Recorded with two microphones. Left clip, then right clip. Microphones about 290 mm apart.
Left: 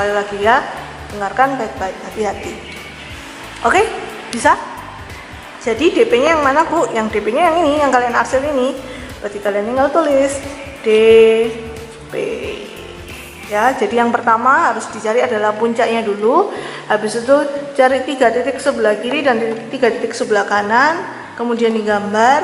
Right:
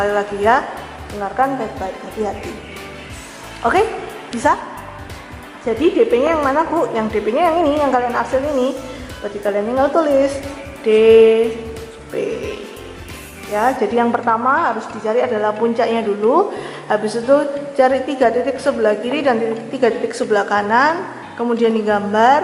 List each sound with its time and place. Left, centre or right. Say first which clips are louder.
0.0 s a woman's voice: left 1 dB; centre
3.6 s a woman's voice: left 2 dB; centre
5.6 s a woman's voice: left 2 dB; centre
9.4 s a woman's voice: left 1 dB; centre
13.5 s a woman's voice: left 2 dB; centre
16.2 s speech: left 1 dB; centre
16.6 s a woman's voice: left 2 dB; centre